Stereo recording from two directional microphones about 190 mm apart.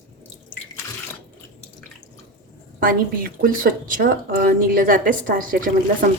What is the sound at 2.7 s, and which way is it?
A woman's voice, 50° right (ahead or behind).